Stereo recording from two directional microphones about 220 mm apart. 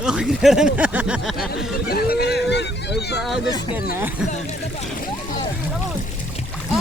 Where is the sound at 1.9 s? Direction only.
45° left (ahead or behind).